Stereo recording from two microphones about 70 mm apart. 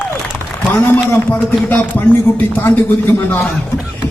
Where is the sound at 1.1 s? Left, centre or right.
Left.